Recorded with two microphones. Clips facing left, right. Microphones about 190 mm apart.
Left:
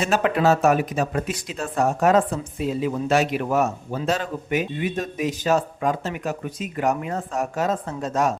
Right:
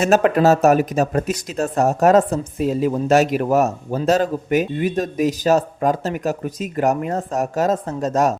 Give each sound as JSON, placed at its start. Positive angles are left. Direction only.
{"t": 0.0, "sound": "speech", "side_deg": -45}